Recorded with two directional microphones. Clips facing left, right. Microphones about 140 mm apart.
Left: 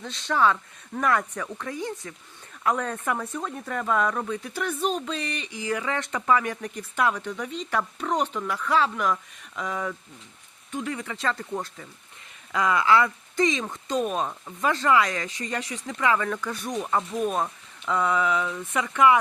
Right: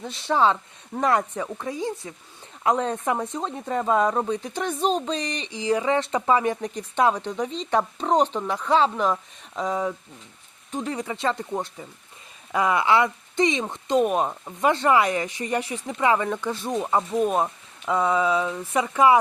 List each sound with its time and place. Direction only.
0.2 s speech: 15° right (ahead or behind)
2.7 s speech: 30° right (ahead or behind)